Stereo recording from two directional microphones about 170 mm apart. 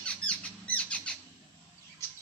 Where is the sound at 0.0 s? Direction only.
5° left (ahead or behind).